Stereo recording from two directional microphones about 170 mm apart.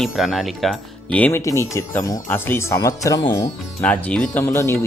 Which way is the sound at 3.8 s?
5° left (ahead or behind).